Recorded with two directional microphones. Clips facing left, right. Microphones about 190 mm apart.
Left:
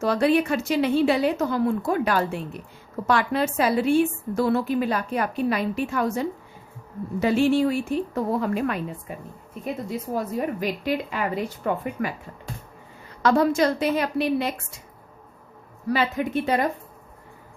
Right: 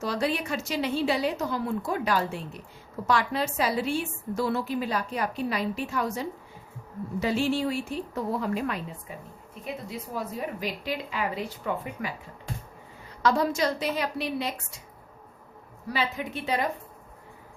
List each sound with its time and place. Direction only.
0.0 s a woman's voice: 55° left (ahead or behind)
10.2 s a woman's voice: 50° left (ahead or behind)
13.2 s a woman's voice: 55° left (ahead or behind)
15.9 s a woman's voice: 50° left (ahead or behind)